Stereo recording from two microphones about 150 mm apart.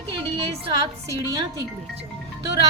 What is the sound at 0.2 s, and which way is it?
A woman's voice, 30° right (ahead or behind).